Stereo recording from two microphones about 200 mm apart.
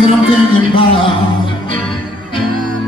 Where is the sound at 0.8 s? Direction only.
25° left (ahead or behind).